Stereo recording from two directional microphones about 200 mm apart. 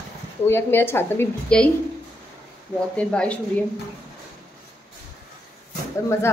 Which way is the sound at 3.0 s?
5° left (ahead or behind).